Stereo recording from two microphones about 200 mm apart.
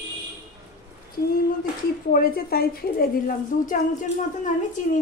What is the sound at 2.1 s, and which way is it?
A woman's voice, 50° left (ahead or behind).